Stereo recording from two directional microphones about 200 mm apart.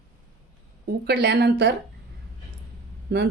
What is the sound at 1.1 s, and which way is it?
Speech, 55° right (ahead or behind).